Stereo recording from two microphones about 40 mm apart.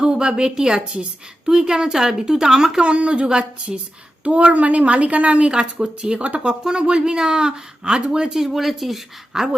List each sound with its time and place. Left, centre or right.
0.0 s speech: right
2.8 s speech: right
3.2 s speech: centre
4.2 s a woman's voice: right
5.5 s speech: right
6.5 s speech: centre